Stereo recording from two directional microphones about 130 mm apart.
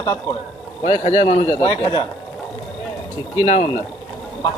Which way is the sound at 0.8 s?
60° left (ahead or behind).